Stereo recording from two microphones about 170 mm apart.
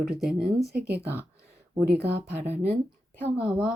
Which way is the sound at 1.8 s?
70° right (ahead or behind).